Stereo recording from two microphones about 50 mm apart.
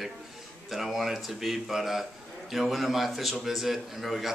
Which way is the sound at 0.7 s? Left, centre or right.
Centre.